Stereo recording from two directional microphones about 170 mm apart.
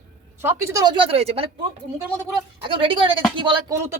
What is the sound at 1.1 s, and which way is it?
Speech, 35° right (ahead or behind).